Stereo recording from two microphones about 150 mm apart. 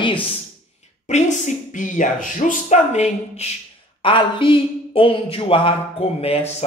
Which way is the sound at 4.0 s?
35° left (ahead or behind).